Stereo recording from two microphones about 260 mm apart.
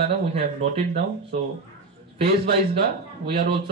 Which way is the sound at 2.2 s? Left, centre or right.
Right.